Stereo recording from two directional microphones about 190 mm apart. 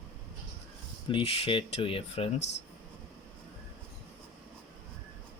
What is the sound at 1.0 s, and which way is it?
Speech, 30° left (ahead or behind).